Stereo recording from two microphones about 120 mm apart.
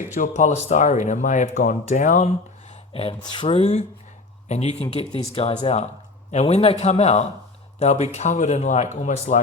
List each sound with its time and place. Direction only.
0.2 s speech: 85° left
2.9 s a man's voice: 50° left (ahead or behind)
5.6 s a man's voice: 65° left (ahead or behind); by 9.4 s 90° left